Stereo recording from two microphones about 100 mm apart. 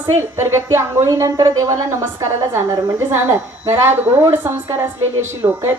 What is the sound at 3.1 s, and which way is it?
A woman's voice, 25° right (ahead or behind).